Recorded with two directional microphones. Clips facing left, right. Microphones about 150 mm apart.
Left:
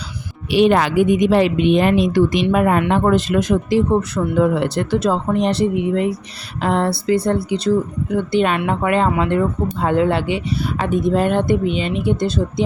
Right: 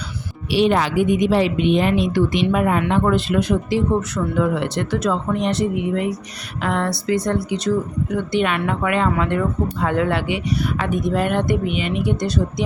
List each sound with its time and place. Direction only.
0.5 s speech: 55° left (ahead or behind); by 12.6 s 25° left (ahead or behind)